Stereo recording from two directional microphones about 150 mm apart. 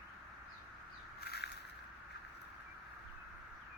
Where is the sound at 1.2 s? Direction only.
90° left.